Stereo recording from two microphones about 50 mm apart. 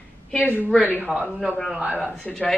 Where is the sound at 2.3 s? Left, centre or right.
Centre.